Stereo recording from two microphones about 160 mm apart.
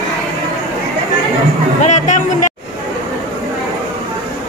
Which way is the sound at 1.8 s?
50° left (ahead or behind).